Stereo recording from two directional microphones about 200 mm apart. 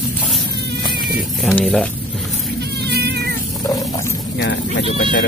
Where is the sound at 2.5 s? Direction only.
55° right (ahead or behind).